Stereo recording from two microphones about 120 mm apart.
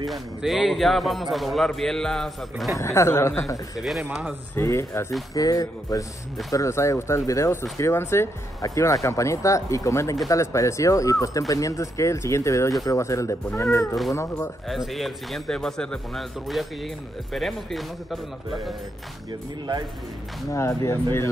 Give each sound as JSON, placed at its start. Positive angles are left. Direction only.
{"t": 0.0, "sound": "speech", "side_deg": 0}
{"t": 2.8, "sound": "speech", "side_deg": 25}
{"t": 3.8, "sound": "speech", "side_deg": -5}
{"t": 4.6, "sound": "speech", "side_deg": 25}
{"t": 14.7, "sound": "speech", "side_deg": 0}
{"t": 20.5, "sound": "speech", "side_deg": 25}